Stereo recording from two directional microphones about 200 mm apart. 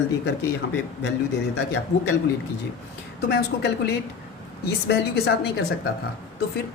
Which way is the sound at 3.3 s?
55° left (ahead or behind).